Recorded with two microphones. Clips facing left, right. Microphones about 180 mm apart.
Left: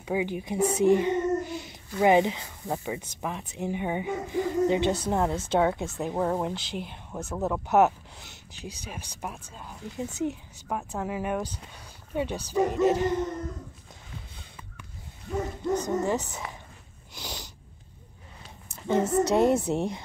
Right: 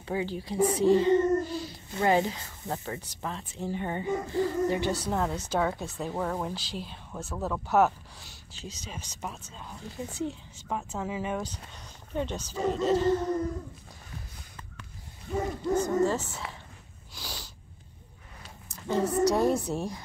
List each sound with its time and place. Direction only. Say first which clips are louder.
0.0 s a child's voice: left 3 dB; 15° left (ahead or behind)
15.7 s speech: right 1 dB; 20° left (ahead or behind)
17.1 s snort: left 3 dB; 20° left (ahead or behind)
18.7 s a woman's voice: left 3 dB; 20° left (ahead or behind)